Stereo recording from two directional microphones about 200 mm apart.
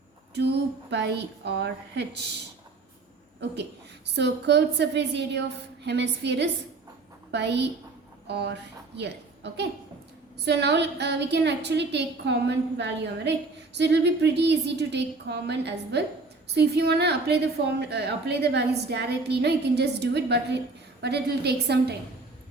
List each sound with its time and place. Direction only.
0.3 s a woman's voice: 55° right (ahead or behind)
3.5 s a woman's voice: 60° right (ahead or behind)